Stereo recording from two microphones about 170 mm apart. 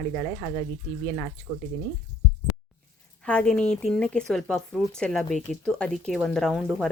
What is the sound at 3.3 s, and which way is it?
Speech, 5° left (ahead or behind).